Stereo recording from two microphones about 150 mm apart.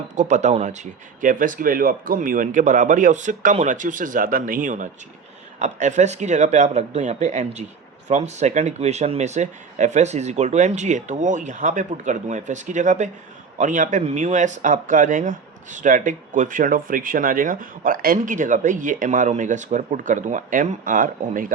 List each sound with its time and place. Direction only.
0.2 s speech: 50° right (ahead or behind)